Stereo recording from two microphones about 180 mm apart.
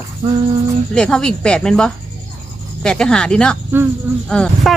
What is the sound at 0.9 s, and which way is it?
Speech, 5° left (ahead or behind).